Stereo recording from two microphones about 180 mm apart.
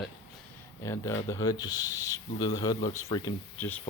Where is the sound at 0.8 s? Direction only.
15° left (ahead or behind).